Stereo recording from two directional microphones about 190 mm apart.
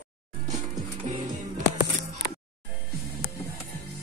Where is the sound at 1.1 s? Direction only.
40° right (ahead or behind).